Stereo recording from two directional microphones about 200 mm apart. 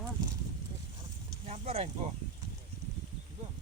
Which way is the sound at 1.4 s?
30° right (ahead or behind).